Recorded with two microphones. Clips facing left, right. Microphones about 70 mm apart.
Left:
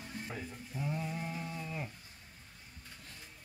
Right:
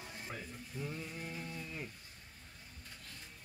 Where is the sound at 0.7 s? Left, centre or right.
Centre.